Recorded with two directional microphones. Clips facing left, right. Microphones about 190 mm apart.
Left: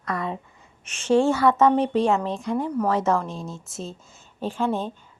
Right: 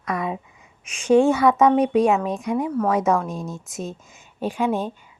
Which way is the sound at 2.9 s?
15° right (ahead or behind).